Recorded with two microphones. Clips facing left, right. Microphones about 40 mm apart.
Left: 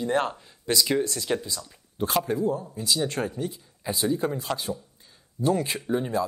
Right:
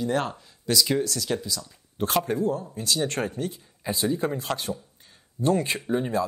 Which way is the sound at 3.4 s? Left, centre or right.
Centre.